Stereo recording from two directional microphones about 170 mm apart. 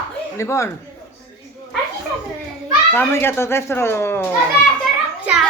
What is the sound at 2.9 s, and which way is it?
A man's voice, 15° left (ahead or behind).